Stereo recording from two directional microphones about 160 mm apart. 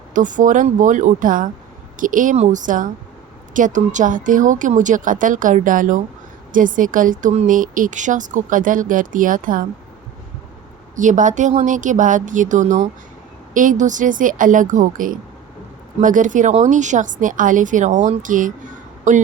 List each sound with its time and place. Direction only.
0.1 s a woman's voice: 55° right (ahead or behind)
10.9 s a woman's voice: 50° right (ahead or behind)